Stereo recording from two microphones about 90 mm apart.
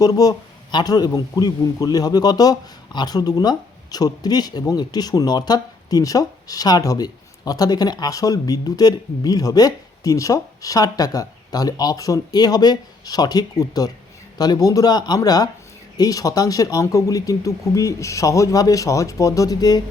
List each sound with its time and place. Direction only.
0.0 s speech: 45° left (ahead or behind)